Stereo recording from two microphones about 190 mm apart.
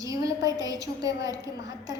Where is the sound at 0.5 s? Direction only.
20° right (ahead or behind).